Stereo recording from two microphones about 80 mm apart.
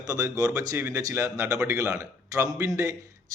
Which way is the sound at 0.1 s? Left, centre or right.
Right.